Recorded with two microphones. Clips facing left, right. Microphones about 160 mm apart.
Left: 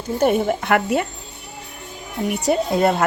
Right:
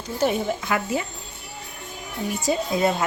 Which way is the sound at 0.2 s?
55° left (ahead or behind).